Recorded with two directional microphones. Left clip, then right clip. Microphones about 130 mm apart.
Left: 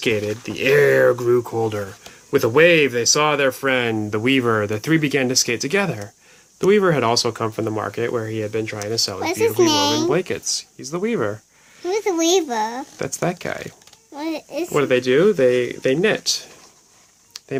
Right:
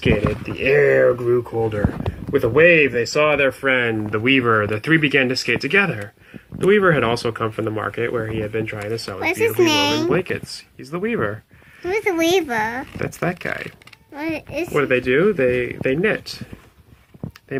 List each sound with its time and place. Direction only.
0.0 s speech: 50° left (ahead or behind); by 10.1 s 20° left (ahead or behind)
10.1 s speech: 40° left (ahead or behind)
11.8 s speech: 20° left (ahead or behind)
14.2 s speech: 20° left (ahead or behind)
14.8 s speech: 35° left (ahead or behind)